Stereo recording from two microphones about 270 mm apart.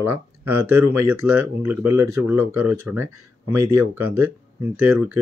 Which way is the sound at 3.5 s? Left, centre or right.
Right.